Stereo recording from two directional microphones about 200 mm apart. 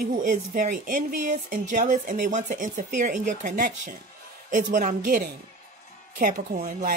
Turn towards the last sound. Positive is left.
turn(degrees=-35)  # may be behind; listen again after turning